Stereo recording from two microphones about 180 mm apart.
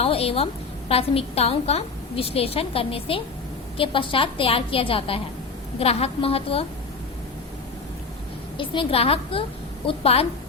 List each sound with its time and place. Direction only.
0.0 s a sound: 35° left (ahead or behind)
0.9 s a woman's voice: 35° left (ahead or behind)
8.5 s a woman's voice: 30° left (ahead or behind)